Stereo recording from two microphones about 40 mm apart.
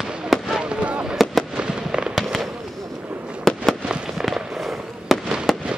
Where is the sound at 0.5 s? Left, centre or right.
Right.